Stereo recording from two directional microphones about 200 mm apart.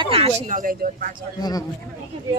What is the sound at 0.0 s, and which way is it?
Speech, 30° right (ahead or behind).